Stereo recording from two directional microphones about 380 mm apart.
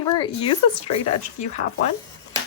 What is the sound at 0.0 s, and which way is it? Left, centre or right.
Speech, centre.